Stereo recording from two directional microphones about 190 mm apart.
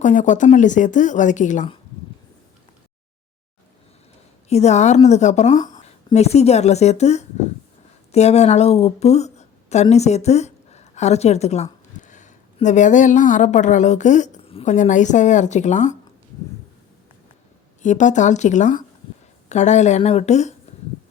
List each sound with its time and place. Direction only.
0.0 s speech: 40° left (ahead or behind)
4.4 s a woman's voice: 35° left (ahead or behind)
17.8 s speech: 40° left (ahead or behind)